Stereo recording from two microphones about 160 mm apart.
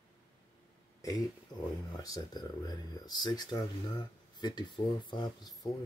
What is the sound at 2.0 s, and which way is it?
Speech, 25° left (ahead or behind).